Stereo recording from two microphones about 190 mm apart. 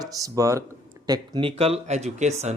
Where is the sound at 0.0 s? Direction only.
20° right (ahead or behind).